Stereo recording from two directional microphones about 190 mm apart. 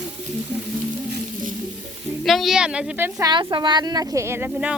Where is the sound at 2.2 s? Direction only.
Centre (ahead or behind).